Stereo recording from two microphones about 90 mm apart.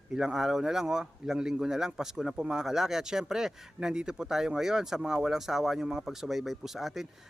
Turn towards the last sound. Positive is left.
turn(degrees=0)  # may be behind; listen again after turning